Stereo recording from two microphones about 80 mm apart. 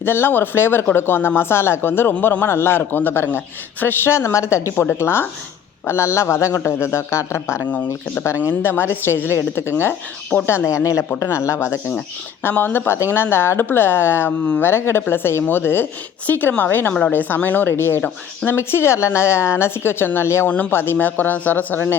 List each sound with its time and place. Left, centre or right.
0.0 s a man's voice: left
8.6 s a woman's voice: left
12.4 s a man's voice: left